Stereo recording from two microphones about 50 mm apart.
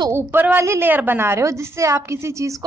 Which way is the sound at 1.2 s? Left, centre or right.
Right.